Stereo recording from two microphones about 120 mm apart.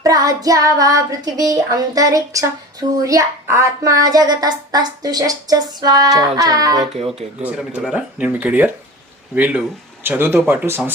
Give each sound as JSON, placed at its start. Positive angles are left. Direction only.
{"t": 0.0, "sound": "child singing", "side_deg": -30}
{"t": 3.0, "sound": "speech", "side_deg": -30}
{"t": 7.4, "sound": "speech", "side_deg": -10}
{"t": 10.0, "sound": "child singing", "side_deg": -20}